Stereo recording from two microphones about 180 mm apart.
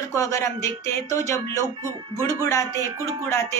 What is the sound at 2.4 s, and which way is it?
A woman's voice, 15° left (ahead or behind).